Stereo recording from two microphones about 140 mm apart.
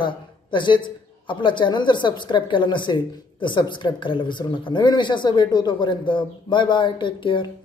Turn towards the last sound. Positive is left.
turn(degrees=35)  # may be behind; listen again after turning